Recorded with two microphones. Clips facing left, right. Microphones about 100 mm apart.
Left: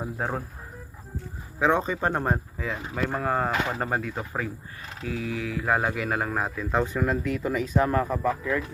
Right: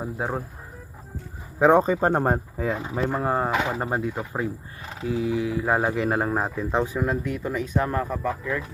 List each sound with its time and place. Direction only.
0.0 s speech: 5° right (ahead or behind)
1.5 s speech: 40° right (ahead or behind)
3.1 s speech: 20° right (ahead or behind)
6.7 s speech: 10° right (ahead or behind)
7.4 s speech: centre (ahead or behind)